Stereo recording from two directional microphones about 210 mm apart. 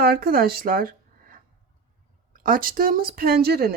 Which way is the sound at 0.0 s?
45° right (ahead or behind).